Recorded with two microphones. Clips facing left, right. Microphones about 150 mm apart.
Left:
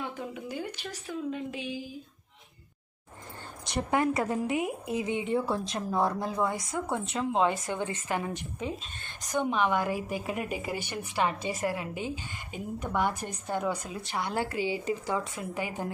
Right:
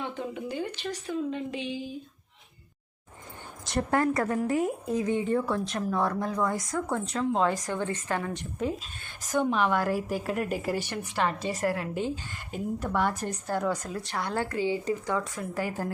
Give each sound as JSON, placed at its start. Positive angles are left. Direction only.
{"t": 0.0, "sound": "a woman's voice", "side_deg": 5}
{"t": 3.7, "sound": "a woman's voice", "side_deg": 0}
{"t": 4.0, "sound": "a woman's voice", "side_deg": 20}
{"t": 8.3, "sound": "a woman's voice", "side_deg": 5}
{"t": 14.3, "sound": "a woman's voice", "side_deg": 15}